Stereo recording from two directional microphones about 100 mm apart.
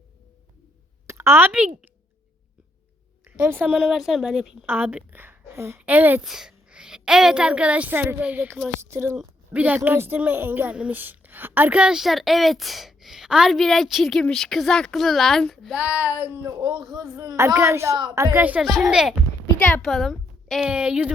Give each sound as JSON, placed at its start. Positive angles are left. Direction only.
{"t": 1.0, "sound": "a woman's voice", "side_deg": -25}
{"t": 3.4, "sound": "a woman's voice", "side_deg": -20}
{"t": 3.8, "sound": "a woman's voice", "side_deg": -5}
{"t": 4.6, "sound": "a woman's voice", "side_deg": -20}
{"t": 5.8, "sound": "a sound", "side_deg": -15}
{"t": 6.2, "sound": "a woman's voice", "side_deg": -5}
{"t": 8.9, "sound": "a woman's voice", "side_deg": -25}
{"t": 9.5, "sound": "a woman's voice", "side_deg": -15}
{"t": 15.7, "sound": "a sound", "side_deg": -15}
{"t": 16.5, "sound": "a woman's voice", "side_deg": -40}
{"t": 18.6, "sound": "a woman's voice", "side_deg": 0}
{"t": 19.5, "sound": "a woman's voice", "side_deg": 15}
{"t": 19.8, "sound": "a woman's voice", "side_deg": 0}